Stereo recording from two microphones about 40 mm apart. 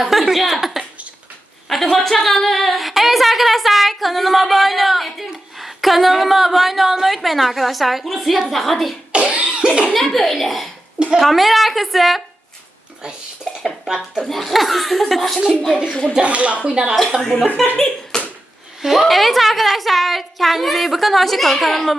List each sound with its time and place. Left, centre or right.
0.0 s a sound: centre
1.7 s a sound: centre
9.1 s cough: right
9.9 s a child's voice: centre
13.0 s speech: centre
14.2 s a woman's voice: centre
15.4 s speech: centre
15.9 s speech: left
16.2 s speech: right
16.6 s speech: right
17.2 s a woman's voice: centre
18.1 s a sound: centre
18.8 s a woman's voice: centre